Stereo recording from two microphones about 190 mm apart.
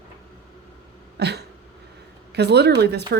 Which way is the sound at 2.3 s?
60° right (ahead or behind).